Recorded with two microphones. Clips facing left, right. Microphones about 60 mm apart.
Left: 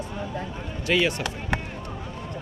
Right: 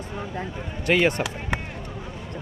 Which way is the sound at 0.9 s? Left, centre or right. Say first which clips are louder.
Right 3 dB; right.